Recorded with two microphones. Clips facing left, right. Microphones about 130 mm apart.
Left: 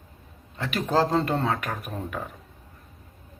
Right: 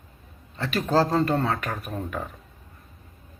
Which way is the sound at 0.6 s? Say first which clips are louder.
Right 1 dB; 15° left (ahead or behind).